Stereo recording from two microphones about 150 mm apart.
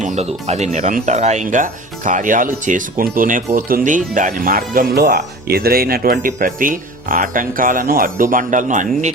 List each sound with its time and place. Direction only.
0.0 s speech: 50° right (ahead or behind)